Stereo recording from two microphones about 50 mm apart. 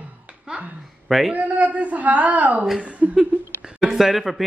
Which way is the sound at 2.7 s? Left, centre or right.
Right.